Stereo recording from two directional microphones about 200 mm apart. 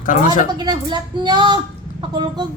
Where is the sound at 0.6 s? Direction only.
20° right (ahead or behind).